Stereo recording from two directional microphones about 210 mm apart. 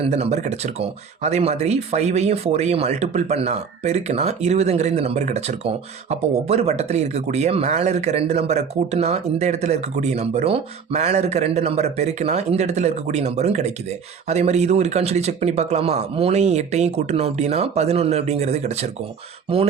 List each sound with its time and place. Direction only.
0.0 s speech: 30° right (ahead or behind)